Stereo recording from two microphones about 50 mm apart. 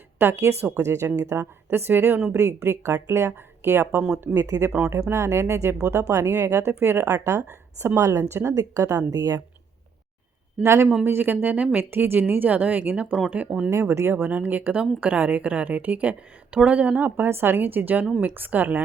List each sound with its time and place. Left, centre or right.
0.2 s speech: right
0.8 s a woman's voice: right
2.3 s a woman's voice: right
7.1 s speech: right
7.9 s a woman's voice: right
8.2 s speech: right
10.6 s speech: right
11.0 s speech: right
11.9 s a woman's voice: right
13.9 s a woman's voice: right
14.2 s a woman's voice: right
17.2 s a woman's voice: right